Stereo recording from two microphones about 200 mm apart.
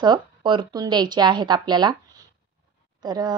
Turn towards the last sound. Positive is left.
turn(degrees=-20)  # may be behind; listen again after turning